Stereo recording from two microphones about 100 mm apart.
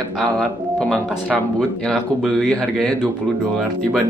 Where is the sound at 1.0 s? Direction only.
15° right (ahead or behind).